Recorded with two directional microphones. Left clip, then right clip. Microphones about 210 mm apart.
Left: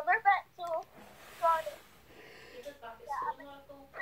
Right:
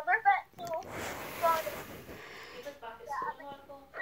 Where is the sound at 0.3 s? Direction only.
10° left (ahead or behind).